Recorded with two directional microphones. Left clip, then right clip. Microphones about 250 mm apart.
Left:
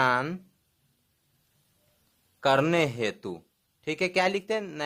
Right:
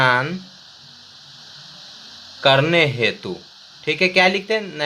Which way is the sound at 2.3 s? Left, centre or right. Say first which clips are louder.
Right 8 dB; left.